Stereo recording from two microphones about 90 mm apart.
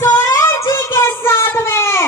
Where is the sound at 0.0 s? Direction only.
40° left (ahead or behind).